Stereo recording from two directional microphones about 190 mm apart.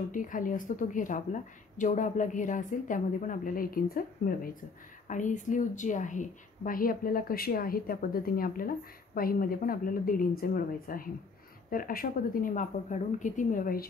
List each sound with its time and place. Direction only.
0.1 s a woman's voice: 45° left (ahead or behind)